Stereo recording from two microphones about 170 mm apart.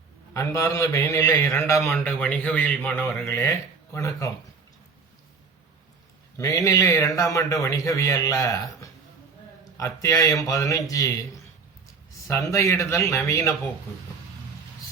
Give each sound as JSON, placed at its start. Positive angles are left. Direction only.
{"t": 0.3, "sound": "a man's voice", "side_deg": 20}
{"t": 3.1, "sound": "a man's voice", "side_deg": 15}
{"t": 6.3, "sound": "a man's voice", "side_deg": 20}
{"t": 9.7, "sound": "a man's voice", "side_deg": 20}